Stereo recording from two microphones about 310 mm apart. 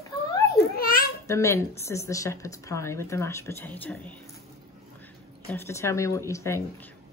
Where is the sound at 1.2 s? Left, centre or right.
Centre.